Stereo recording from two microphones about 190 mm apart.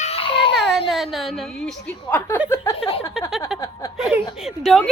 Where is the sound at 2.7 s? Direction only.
30° left (ahead or behind).